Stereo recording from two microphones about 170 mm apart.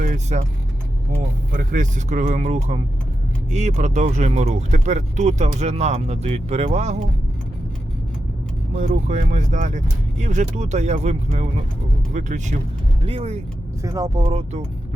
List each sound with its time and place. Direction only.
0.0 s vehicle: 50° right (ahead or behind)
1.5 s speech: 45° right (ahead or behind)
8.8 s speech: 45° right (ahead or behind)
13.8 s speech: 20° right (ahead or behind)
14.2 s speech: 35° right (ahead or behind)